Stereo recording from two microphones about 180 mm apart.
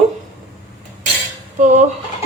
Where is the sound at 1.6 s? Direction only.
45° right (ahead or behind).